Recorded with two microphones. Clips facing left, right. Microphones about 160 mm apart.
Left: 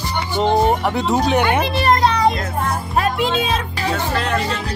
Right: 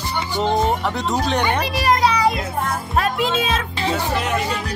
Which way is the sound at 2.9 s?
Centre (ahead or behind).